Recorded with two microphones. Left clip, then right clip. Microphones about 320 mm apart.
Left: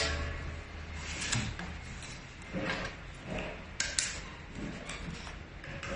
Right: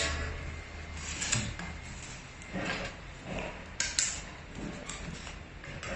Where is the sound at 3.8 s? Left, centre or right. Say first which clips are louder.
Right 1 dB; centre.